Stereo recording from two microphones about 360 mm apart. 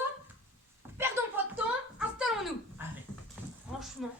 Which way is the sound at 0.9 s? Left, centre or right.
Centre.